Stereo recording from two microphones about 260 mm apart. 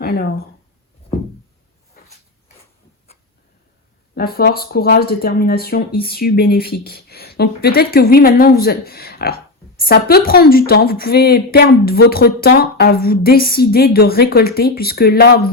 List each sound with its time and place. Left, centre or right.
0.0 s speech: left
2.0 s a sound: left
4.1 s a woman's voice: left